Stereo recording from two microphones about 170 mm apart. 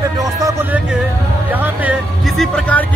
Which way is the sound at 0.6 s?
10° right (ahead or behind).